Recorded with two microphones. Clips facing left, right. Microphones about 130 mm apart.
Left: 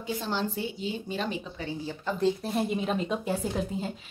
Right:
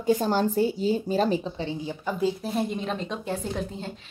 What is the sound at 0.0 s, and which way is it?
A woman's voice, 45° right (ahead or behind).